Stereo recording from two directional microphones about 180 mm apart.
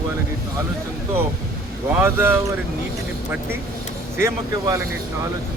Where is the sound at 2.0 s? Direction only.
10° right (ahead or behind).